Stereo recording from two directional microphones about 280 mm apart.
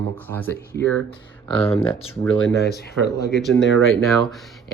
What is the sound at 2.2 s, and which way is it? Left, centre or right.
Speech, centre.